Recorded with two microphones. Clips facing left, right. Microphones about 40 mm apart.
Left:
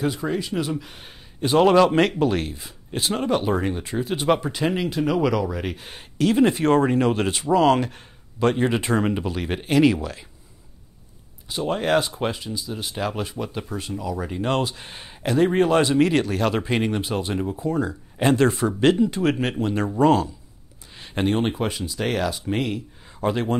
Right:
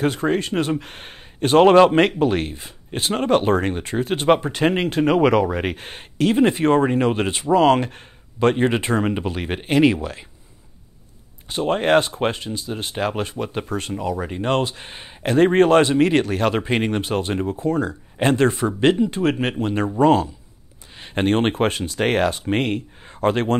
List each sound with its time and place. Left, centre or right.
0.0 s speech: right
11.4 s speech: right
13.7 s speech: right
14.2 s speech: right
15.3 s speech: right